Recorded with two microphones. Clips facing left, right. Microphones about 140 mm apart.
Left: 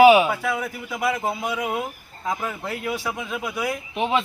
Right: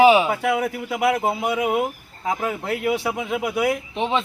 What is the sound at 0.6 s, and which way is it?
Speech, 65° right (ahead or behind).